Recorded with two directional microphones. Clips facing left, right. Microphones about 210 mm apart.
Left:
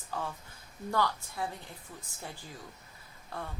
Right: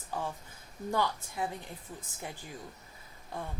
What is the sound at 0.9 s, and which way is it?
Speech, 20° right (ahead or behind).